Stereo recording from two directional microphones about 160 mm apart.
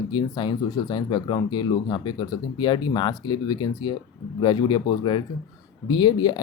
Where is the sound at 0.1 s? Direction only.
30° left (ahead or behind).